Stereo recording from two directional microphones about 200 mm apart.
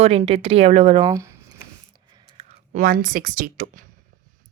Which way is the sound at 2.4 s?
25° right (ahead or behind).